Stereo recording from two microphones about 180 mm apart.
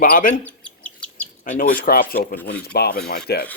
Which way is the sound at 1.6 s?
55° left (ahead or behind).